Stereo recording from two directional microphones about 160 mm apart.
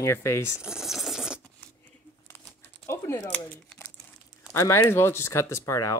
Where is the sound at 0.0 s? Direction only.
15° left (ahead or behind).